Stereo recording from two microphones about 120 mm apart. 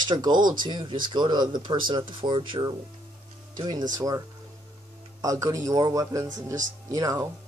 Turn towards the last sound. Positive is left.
turn(degrees=-30)  # may be behind; listen again after turning